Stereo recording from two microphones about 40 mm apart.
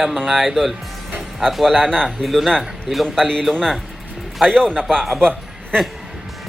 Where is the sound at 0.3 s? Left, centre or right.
Centre.